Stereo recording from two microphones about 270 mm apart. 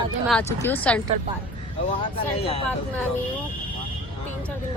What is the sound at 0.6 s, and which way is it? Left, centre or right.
Speech, centre.